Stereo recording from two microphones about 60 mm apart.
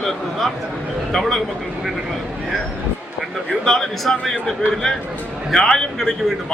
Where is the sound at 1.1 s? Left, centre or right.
Centre.